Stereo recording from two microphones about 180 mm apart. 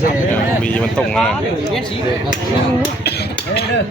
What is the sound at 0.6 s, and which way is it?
Speech, 5° left (ahead or behind).